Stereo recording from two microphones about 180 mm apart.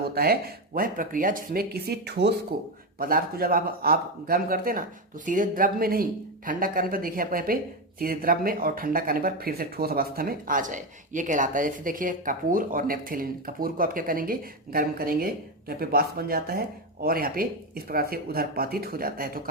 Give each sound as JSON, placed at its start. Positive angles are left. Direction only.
{"t": 0.0, "sound": "speech", "side_deg": -60}